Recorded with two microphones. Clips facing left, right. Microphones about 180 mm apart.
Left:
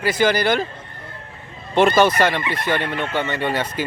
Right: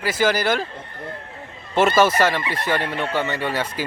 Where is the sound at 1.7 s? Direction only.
5° right (ahead or behind).